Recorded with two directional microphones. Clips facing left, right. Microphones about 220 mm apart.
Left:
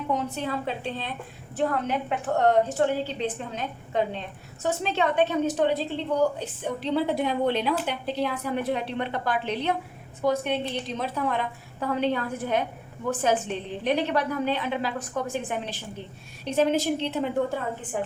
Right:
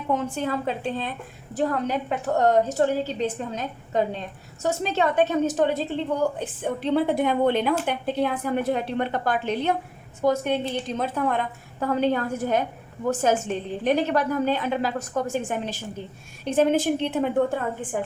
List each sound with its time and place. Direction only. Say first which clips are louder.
0.1 s a woman's voice: right 4 dB; 50° right (ahead or behind)